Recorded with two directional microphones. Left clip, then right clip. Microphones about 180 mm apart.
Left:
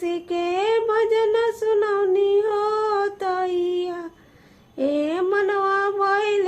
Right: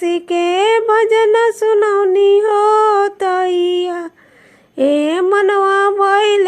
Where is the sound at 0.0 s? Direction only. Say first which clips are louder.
Right 9 dB; 35° right (ahead or behind).